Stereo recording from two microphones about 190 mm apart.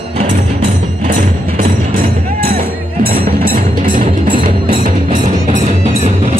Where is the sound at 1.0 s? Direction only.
40° right (ahead or behind).